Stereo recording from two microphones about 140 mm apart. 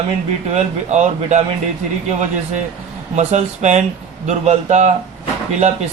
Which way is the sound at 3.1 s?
55° right (ahead or behind).